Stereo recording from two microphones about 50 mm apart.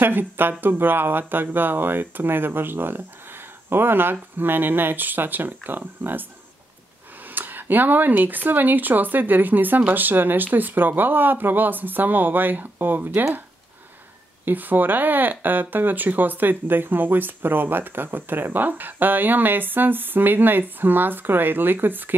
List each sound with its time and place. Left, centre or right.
0.0 s speech: right
7.3 s speech: right
14.4 s speech: right